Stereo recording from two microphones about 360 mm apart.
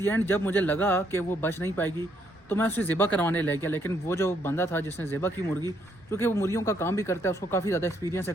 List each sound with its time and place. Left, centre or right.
0.0 s speech: centre